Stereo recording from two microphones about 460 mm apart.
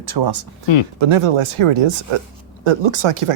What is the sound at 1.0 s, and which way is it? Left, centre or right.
Speech, right.